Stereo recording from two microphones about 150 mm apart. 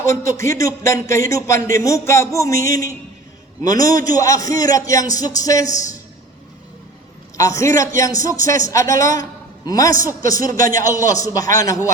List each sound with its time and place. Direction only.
0.0 s speech: 20° left (ahead or behind)
7.3 s a man's voice: 20° left (ahead or behind)
10.4 s a man's voice: 65° right (ahead or behind)
10.7 s speech: 20° left (ahead or behind)